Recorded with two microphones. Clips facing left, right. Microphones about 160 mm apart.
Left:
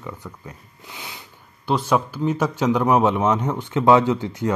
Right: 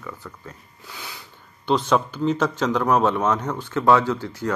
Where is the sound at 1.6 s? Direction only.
5° left (ahead or behind).